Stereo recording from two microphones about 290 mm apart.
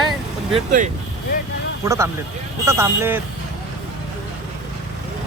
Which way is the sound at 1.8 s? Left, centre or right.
Centre.